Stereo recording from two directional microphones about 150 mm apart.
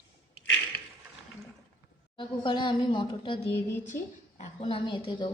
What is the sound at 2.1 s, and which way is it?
A woman's voice, 30° left (ahead or behind).